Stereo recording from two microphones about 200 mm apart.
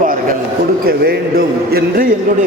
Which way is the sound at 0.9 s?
50° right (ahead or behind).